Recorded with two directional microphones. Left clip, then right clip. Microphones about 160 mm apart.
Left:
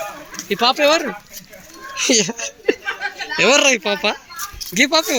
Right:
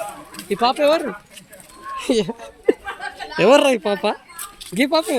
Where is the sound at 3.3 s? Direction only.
35° right (ahead or behind).